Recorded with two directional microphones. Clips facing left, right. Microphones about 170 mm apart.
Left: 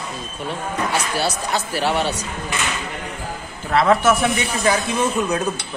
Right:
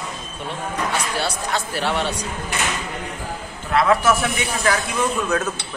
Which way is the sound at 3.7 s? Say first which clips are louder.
Left 1 dB; 30° left (ahead or behind).